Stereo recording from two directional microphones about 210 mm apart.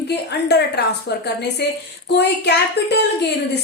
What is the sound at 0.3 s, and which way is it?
A woman's voice, 50° left (ahead or behind).